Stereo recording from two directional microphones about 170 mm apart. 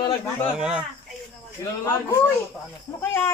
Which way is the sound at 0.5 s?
5° right (ahead or behind).